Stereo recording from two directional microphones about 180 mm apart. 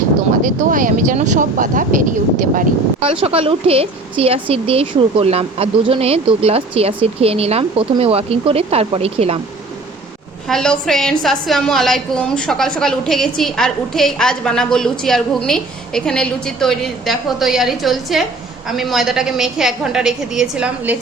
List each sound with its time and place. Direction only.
0.4 s speech: 50° right (ahead or behind)
3.0 s speech: 30° right (ahead or behind)
10.5 s a woman's voice: 5° left (ahead or behind)